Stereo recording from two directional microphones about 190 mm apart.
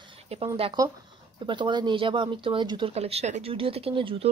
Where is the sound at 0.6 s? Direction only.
30° right (ahead or behind).